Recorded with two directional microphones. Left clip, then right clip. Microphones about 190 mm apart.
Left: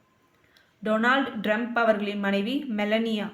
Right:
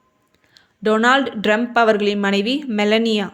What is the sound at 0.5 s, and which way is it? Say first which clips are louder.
Speech: right 8 dB; 45° right (ahead or behind).